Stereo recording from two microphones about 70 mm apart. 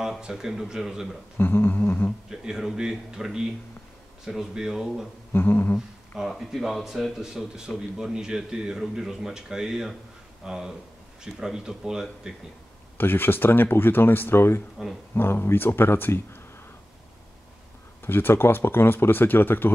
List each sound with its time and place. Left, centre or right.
0.0 s speech: centre
1.4 s speech: left
2.2 s speech: centre
5.3 s speech: left
6.1 s speech: centre
12.9 s speech: left
18.0 s speech: left